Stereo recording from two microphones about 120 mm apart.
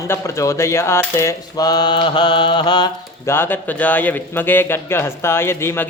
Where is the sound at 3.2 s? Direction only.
20° left (ahead or behind).